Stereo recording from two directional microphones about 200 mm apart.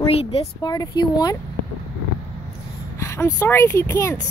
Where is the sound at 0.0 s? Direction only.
30° left (ahead or behind).